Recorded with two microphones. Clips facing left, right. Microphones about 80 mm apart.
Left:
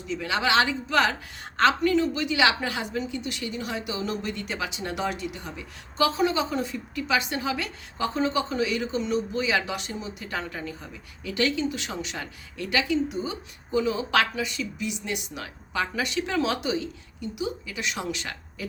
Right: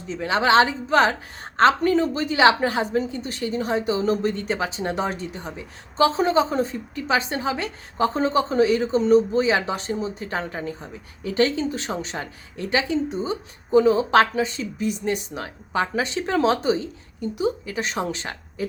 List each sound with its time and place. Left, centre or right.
0.1 s a woman's voice: right